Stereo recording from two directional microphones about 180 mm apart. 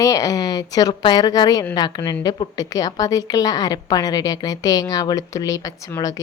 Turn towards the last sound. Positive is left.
turn(degrees=20)  # may be behind; listen again after turning